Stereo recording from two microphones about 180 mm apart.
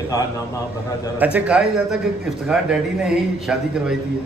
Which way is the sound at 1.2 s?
10° right (ahead or behind).